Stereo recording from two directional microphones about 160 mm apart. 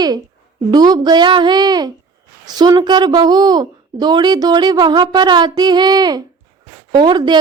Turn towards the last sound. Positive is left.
turn(degrees=-30)  # may be behind; listen again after turning